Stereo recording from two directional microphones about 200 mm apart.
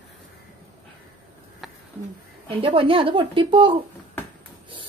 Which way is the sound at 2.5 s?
25° right (ahead or behind).